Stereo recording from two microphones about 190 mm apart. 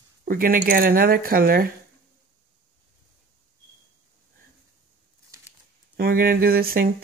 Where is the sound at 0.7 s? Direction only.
50° right (ahead or behind).